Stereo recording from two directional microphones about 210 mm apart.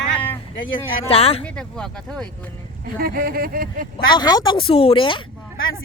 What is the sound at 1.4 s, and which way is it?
Speech, 5° left (ahead or behind).